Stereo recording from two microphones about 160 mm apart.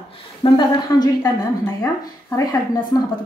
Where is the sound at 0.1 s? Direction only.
30° left (ahead or behind).